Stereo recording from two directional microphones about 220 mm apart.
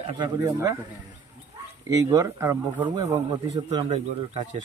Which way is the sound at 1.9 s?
15° right (ahead or behind).